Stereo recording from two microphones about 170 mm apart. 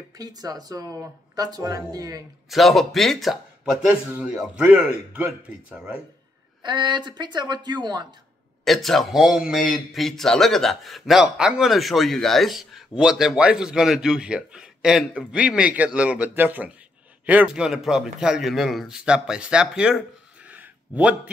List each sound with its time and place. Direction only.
0.2 s a woman's voice: 20° right (ahead or behind)
2.5 s a man's voice: centre (ahead or behind)
6.6 s a woman's voice: 25° right (ahead or behind)
8.6 s a man's voice: centre (ahead or behind)
20.4 s a sound: 10° right (ahead or behind)